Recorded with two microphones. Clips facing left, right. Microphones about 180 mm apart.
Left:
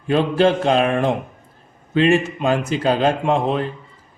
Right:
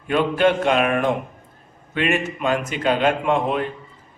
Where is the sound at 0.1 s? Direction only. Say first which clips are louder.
Left 2 dB; 30° left (ahead or behind).